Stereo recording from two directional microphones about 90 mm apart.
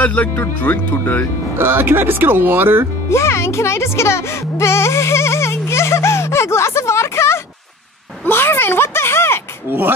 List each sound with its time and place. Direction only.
0.0 s speech: 15° left (ahead or behind)
1.6 s speech: 25° right (ahead or behind)
3.1 s music: 30° left (ahead or behind)
8.3 s a sound: 25° left (ahead or behind)
9.7 s speech: 25° right (ahead or behind)